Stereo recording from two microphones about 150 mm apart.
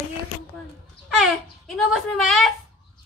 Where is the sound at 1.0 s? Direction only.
Centre (ahead or behind).